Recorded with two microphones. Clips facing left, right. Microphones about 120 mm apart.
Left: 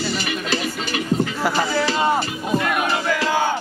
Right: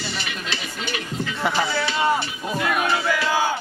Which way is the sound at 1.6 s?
35° left (ahead or behind).